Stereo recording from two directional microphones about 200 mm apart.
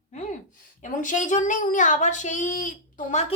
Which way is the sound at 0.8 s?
40° left (ahead or behind).